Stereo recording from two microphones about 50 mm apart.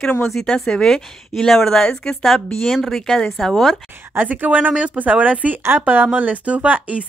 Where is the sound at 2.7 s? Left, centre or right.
Centre.